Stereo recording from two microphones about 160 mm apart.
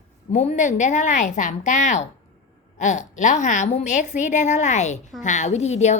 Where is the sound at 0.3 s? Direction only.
50° left (ahead or behind).